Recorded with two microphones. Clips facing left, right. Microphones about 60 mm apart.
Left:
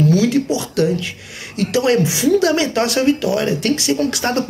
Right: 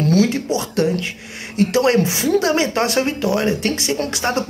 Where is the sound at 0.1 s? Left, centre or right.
Right.